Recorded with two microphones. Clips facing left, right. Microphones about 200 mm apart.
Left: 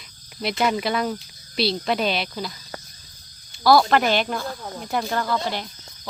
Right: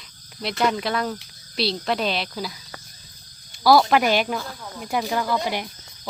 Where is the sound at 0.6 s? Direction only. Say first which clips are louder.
Even; 5° left (ahead or behind).